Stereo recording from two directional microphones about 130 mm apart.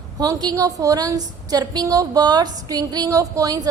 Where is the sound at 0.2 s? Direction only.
30° right (ahead or behind).